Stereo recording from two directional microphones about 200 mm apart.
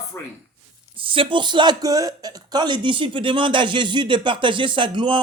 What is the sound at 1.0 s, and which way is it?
Speech, 25° right (ahead or behind).